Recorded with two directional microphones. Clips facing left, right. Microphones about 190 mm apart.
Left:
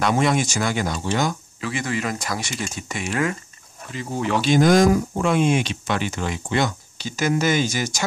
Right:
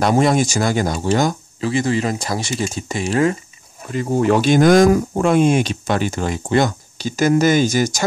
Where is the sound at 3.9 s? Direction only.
45° right (ahead or behind).